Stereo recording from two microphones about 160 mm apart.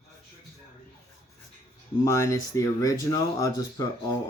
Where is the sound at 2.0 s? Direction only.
20° left (ahead or behind).